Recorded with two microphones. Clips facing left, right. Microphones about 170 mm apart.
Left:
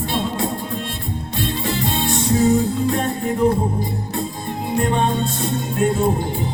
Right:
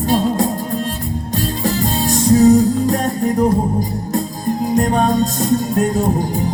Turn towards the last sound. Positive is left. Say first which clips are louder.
# right 4 dB
turn(degrees=-40)  # may be behind; listen again after turning